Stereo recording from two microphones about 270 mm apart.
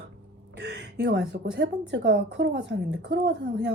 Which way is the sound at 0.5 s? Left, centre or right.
Right.